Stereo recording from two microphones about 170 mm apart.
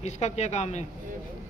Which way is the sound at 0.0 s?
40° left (ahead or behind).